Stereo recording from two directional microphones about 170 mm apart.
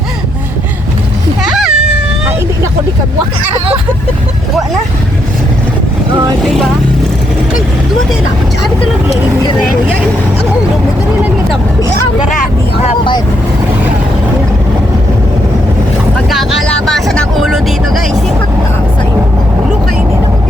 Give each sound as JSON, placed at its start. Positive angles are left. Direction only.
{"t": 1.4, "sound": "a sound", "side_deg": 0}
{"t": 6.4, "sound": "speech", "side_deg": 0}
{"t": 12.8, "sound": "speech", "side_deg": 30}
{"t": 16.3, "sound": "speech", "side_deg": 0}